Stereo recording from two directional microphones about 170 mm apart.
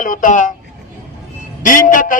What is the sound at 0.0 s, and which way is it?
Speech, 50° left (ahead or behind).